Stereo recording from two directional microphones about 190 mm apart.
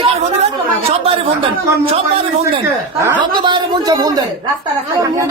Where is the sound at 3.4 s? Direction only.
25° right (ahead or behind).